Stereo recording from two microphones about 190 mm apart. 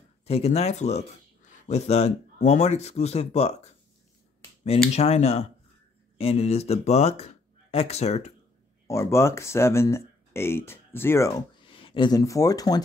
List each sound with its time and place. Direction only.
0.2 s speech: 30° left (ahead or behind)
4.9 s speech: 35° left (ahead or behind)
8.8 s speech: 15° left (ahead or behind)